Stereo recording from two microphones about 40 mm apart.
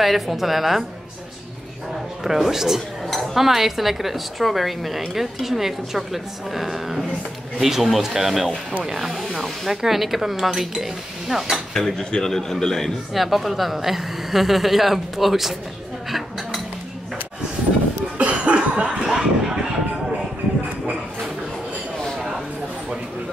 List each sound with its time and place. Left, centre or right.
0.0 s speech: centre
2.2 s speech: centre
11.7 s a man's voice: centre
13.1 s speech: centre
16.1 s dishes: centre
18.1 s cough: right
19.0 s a sound: centre